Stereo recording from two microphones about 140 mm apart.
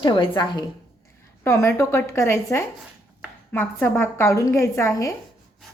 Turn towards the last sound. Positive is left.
turn(degrees=20)  # may be behind; listen again after turning